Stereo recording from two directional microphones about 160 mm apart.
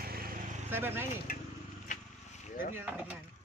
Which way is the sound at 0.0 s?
70° right (ahead or behind).